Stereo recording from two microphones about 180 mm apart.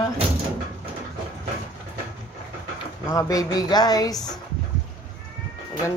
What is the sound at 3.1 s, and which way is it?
Speech, 20° left (ahead or behind).